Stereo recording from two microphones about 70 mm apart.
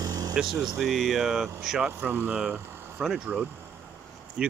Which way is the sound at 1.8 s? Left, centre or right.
Right.